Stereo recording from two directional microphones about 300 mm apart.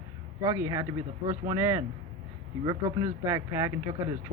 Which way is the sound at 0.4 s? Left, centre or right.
Centre.